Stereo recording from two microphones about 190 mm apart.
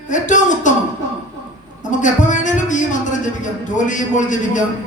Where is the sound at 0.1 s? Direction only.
40° left (ahead or behind).